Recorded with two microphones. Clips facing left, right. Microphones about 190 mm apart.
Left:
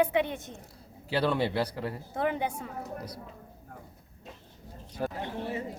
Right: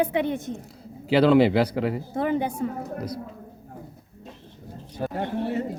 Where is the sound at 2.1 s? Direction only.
35° right (ahead or behind).